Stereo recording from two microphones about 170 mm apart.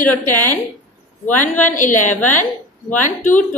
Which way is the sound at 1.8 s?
50° left (ahead or behind).